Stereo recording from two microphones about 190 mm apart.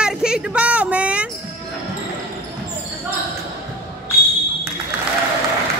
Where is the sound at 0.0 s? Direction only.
5° right (ahead or behind).